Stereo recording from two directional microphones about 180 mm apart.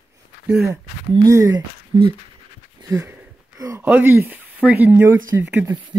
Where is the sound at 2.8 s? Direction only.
15° right (ahead or behind).